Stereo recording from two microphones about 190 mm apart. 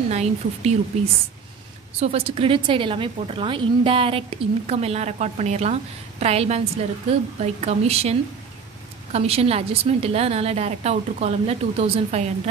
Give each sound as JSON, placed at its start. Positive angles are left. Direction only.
{"t": 0.1, "sound": "a woman's voice", "side_deg": -35}
{"t": 2.0, "sound": "a woman's voice", "side_deg": -30}